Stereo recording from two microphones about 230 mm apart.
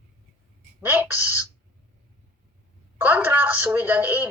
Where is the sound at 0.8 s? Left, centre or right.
Centre.